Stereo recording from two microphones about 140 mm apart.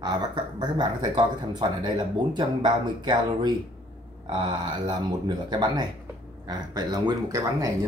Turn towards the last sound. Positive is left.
turn(degrees=-25)  # may be behind; listen again after turning